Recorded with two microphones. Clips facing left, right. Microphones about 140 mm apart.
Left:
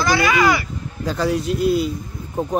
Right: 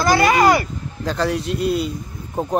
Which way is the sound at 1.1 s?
Centre (ahead or behind).